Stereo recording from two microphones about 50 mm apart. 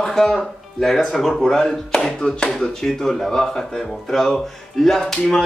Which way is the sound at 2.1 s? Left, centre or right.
Centre.